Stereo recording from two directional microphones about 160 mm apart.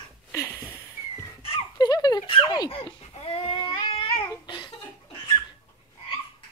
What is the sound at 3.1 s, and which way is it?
Babbling, 35° left (ahead or behind).